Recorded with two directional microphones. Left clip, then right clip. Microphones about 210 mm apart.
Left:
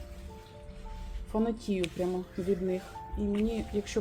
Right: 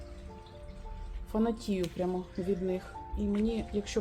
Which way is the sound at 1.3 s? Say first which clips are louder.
Even; 10° left (ahead or behind).